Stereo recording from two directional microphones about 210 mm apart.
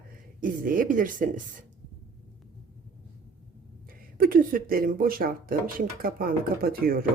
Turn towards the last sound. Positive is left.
turn(degrees=-45)  # may be behind; listen again after turning